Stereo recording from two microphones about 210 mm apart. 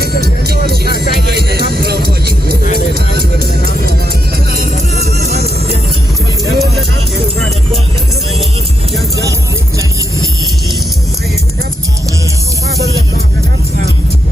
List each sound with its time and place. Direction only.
0.0 s music: 50° right (ahead or behind)
5.2 s music: 30° right (ahead or behind)
6.4 s music: centre (ahead or behind)